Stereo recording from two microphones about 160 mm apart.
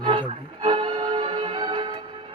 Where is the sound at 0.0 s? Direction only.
30° right (ahead or behind).